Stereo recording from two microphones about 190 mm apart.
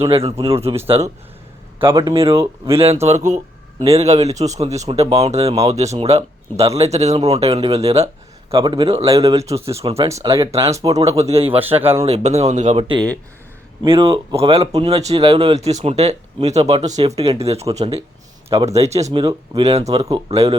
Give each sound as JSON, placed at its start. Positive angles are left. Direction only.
{"t": 0.1, "sound": "speech", "side_deg": -30}
{"t": 1.8, "sound": "speech", "side_deg": -15}
{"t": 2.7, "sound": "speech", "side_deg": -30}
{"t": 8.4, "sound": "a man's voice", "side_deg": -20}
{"t": 9.0, "sound": "speech", "side_deg": -15}
{"t": 9.8, "sound": "speech", "side_deg": -30}
{"t": 13.8, "sound": "a man's voice", "side_deg": -30}
{"t": 19.2, "sound": "a man's voice", "side_deg": -20}
{"t": 19.6, "sound": "a man's voice", "side_deg": -35}